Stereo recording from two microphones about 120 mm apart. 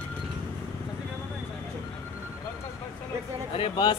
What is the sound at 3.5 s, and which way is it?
Speech, 45° left (ahead or behind).